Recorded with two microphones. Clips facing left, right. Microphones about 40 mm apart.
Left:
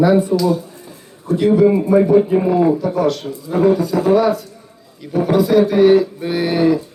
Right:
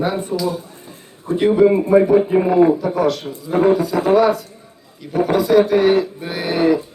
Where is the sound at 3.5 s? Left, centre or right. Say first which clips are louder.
Even; right.